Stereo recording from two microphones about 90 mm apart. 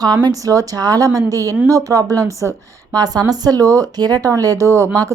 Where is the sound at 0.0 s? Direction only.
50° right (ahead or behind).